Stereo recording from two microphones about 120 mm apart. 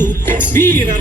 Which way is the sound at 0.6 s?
20° left (ahead or behind).